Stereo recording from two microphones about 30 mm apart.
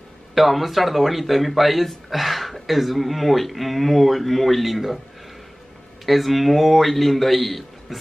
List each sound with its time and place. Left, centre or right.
0.3 s speech: centre
6.0 s speech: centre